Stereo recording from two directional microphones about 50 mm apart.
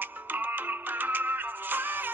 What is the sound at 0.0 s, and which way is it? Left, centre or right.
Music, right.